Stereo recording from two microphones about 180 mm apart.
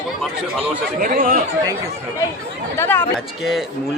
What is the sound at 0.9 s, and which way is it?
Speech, 50° right (ahead or behind).